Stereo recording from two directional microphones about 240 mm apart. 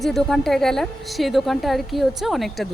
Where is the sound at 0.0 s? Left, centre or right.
Centre.